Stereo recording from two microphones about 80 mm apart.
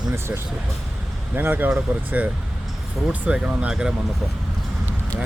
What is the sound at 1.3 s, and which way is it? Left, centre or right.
Speech, right.